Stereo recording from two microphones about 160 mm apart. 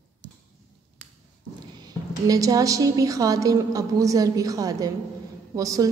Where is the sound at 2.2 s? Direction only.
20° right (ahead or behind).